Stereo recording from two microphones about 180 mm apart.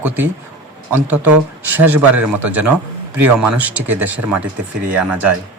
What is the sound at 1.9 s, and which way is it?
Speech, 10° right (ahead or behind).